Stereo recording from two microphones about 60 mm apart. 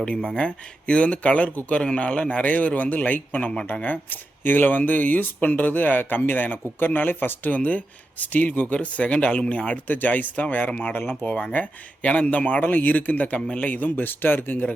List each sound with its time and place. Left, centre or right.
0.0 s speech: centre; by 14.7 s left